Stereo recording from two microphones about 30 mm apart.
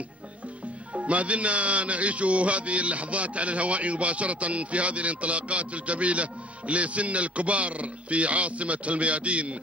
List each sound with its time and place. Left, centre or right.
0.9 s speech: right